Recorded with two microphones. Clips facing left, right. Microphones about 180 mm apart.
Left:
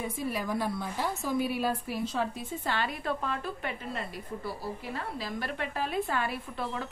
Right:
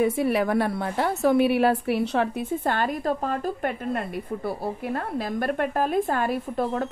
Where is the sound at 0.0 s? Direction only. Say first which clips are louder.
Right 11 dB; 70° right (ahead or behind).